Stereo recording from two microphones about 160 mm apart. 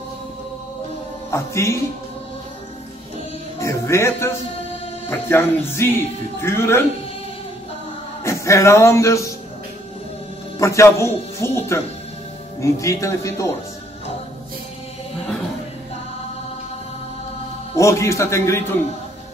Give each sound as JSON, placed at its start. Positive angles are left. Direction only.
{"t": 1.3, "sound": "speech", "side_deg": 15}
{"t": 3.5, "sound": "music", "side_deg": 15}
{"t": 5.3, "sound": "speech", "side_deg": 15}
{"t": 8.2, "sound": "music", "side_deg": 20}
{"t": 10.6, "sound": "speech", "side_deg": 20}
{"t": 17.7, "sound": "speech", "side_deg": 20}